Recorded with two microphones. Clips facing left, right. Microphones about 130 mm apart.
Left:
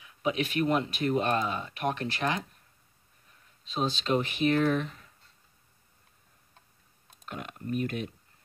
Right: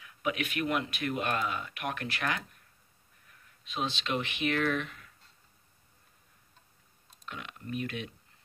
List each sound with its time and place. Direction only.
0.0 s speech: 30° left (ahead or behind)
3.6 s speech: 35° left (ahead or behind)
7.2 s speech: 40° left (ahead or behind)